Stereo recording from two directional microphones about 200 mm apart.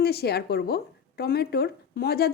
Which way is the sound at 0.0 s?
55° left (ahead or behind).